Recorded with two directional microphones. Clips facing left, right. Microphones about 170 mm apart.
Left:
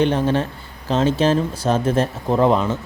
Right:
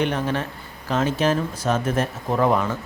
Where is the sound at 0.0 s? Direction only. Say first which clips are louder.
Left 5 dB; 30° left (ahead or behind).